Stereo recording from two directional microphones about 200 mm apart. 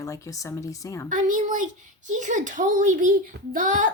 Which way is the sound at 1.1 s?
40° right (ahead or behind).